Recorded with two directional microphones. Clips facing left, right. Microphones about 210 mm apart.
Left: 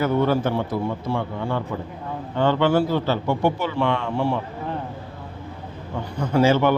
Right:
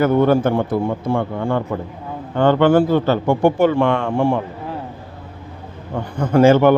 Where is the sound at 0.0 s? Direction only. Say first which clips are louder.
Right 6 dB; 50° right (ahead or behind).